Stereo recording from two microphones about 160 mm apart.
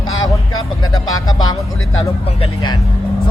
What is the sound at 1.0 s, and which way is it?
Speech, 25° left (ahead or behind).